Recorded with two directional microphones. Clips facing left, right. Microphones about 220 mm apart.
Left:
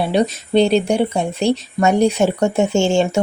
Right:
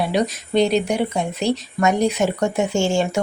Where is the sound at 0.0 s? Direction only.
30° left (ahead or behind).